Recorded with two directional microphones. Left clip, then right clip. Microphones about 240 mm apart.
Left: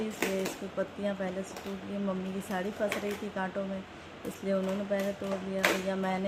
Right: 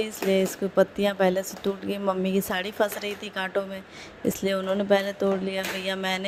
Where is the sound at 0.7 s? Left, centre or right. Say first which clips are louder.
Right 13 dB; right.